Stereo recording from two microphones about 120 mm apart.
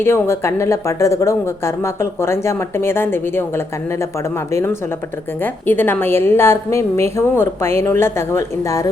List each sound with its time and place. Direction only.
0.0 s speech: 20° left (ahead or behind)